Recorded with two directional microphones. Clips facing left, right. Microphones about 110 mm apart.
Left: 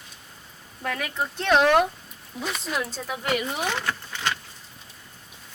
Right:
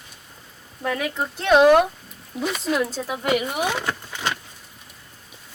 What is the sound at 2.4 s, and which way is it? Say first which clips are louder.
Speech: right 6 dB; centre (ahead or behind).